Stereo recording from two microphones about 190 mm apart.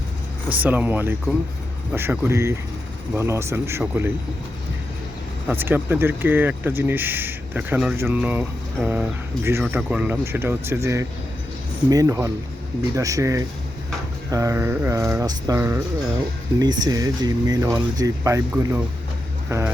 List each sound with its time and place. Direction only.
0.5 s speech: 10° right (ahead or behind)
5.5 s speech: 10° right (ahead or behind)